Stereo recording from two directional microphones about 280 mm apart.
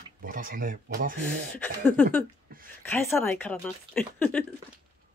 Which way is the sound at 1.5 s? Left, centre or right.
Centre.